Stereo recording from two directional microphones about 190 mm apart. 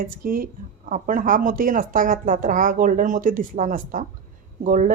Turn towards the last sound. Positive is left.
turn(degrees=-45)  # may be behind; listen again after turning